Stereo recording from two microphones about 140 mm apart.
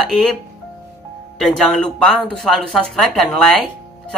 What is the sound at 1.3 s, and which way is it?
Speech, centre (ahead or behind).